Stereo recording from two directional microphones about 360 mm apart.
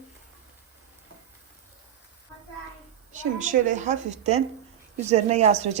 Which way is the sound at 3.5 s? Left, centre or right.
Right.